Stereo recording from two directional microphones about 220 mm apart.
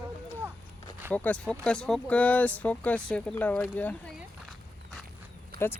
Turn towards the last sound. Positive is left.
turn(degrees=-45)  # may be behind; listen again after turning